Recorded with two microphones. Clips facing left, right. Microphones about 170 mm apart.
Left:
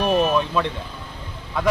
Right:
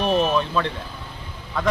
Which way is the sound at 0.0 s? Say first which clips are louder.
Left 1 dB; 10° left (ahead or behind).